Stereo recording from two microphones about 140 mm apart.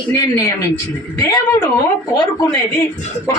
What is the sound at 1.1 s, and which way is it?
A woman's voice, 25° left (ahead or behind).